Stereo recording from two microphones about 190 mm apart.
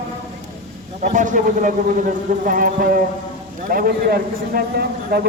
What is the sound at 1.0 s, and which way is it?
A man's voice, 40° right (ahead or behind).